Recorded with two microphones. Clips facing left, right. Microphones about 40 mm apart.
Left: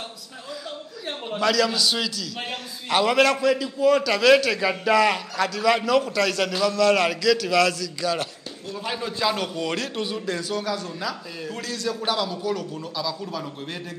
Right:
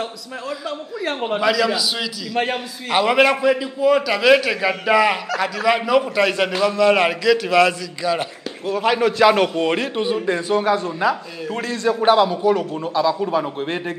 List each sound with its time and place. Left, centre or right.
1.4 s a man's voice: centre
8.7 s a man's voice: right
9.7 s a man's voice: right